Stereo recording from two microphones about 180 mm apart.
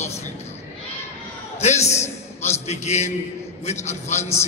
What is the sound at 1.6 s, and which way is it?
A man's voice, 40° left (ahead or behind).